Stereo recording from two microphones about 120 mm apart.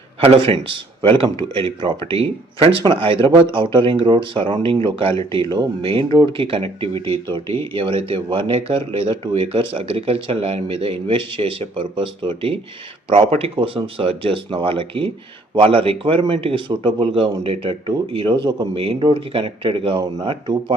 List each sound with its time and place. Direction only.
0.2 s speech: 50° right (ahead or behind)